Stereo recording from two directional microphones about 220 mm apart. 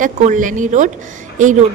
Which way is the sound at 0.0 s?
35° right (ahead or behind).